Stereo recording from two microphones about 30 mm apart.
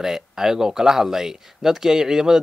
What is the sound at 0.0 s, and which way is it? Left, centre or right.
Speech, centre.